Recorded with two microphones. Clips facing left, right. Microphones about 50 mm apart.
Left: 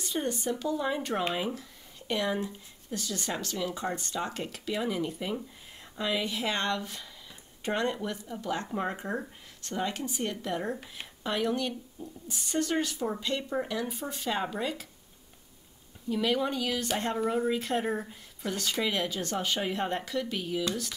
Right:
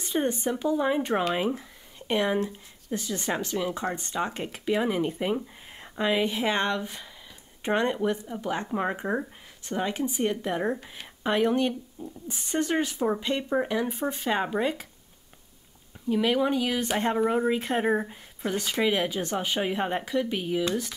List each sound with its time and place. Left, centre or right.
0.0 s speech: right
16.1 s a woman's voice: centre